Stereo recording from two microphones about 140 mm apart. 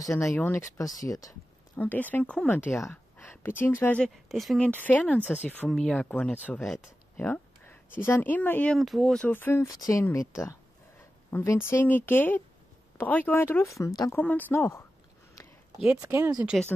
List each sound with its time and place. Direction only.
0.0 s speech: 20° left (ahead or behind)
1.8 s speech: 10° left (ahead or behind)
7.2 s speech: 15° left (ahead or behind)
8.7 s speech: centre (ahead or behind); by 14.1 s 25° left (ahead or behind)
14.1 s speech: 15° left (ahead or behind)
16.0 s speech: 15° right (ahead or behind)